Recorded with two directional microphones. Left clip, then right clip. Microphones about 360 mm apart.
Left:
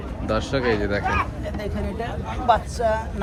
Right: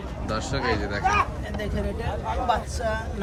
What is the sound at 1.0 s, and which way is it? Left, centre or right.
Speech, right.